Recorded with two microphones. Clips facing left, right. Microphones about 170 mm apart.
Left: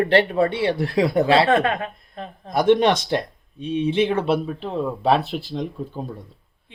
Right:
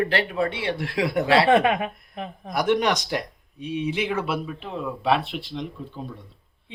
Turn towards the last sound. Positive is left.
turn(degrees=40)  # may be behind; listen again after turning